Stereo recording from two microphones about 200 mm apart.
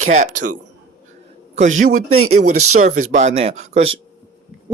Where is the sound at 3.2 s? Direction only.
30° right (ahead or behind).